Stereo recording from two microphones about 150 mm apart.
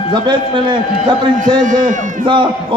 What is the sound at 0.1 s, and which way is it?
Speech, 30° right (ahead or behind).